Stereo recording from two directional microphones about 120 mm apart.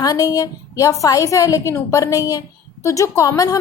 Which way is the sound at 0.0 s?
30° left (ahead or behind).